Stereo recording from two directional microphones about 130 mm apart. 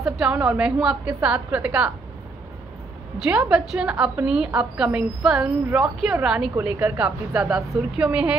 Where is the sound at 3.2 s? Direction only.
5° right (ahead or behind).